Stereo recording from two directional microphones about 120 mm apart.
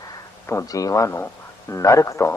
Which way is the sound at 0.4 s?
25° left (ahead or behind).